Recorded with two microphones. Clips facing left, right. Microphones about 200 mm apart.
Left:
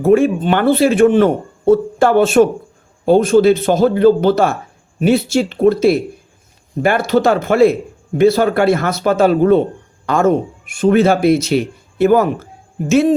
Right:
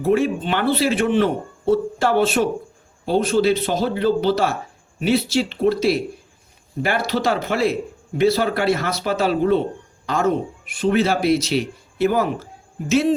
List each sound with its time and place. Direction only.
0.0 s speech: 50° left (ahead or behind)